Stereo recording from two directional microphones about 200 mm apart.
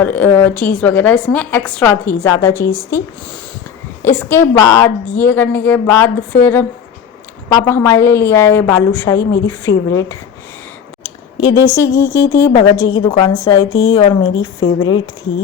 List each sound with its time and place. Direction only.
0.0 s a woman's voice: 10° left (ahead or behind)
4.0 s a woman's voice: 10° left (ahead or behind)
11.3 s a woman's voice: 20° left (ahead or behind)